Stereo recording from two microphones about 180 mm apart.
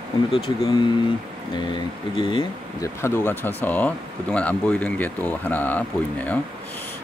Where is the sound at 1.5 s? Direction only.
25° left (ahead or behind).